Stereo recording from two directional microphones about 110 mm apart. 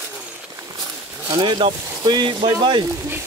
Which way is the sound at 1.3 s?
45° right (ahead or behind).